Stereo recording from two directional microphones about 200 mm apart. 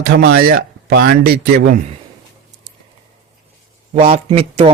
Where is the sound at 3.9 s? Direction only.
35° right (ahead or behind).